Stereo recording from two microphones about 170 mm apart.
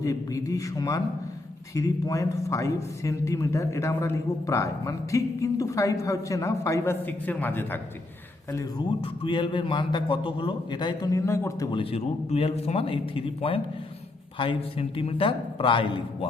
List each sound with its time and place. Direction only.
0.0 s a man's voice: 20° left (ahead or behind)
8.5 s a man's voice: 30° left (ahead or behind)
11.7 s speech: 30° left (ahead or behind)